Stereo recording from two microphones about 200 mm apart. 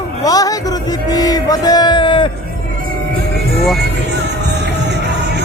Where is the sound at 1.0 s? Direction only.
20° left (ahead or behind).